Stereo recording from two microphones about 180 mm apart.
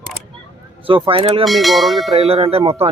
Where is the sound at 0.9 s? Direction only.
30° right (ahead or behind).